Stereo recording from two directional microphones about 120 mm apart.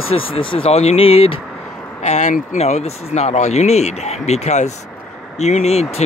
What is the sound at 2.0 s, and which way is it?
Speech, 75° left (ahead or behind).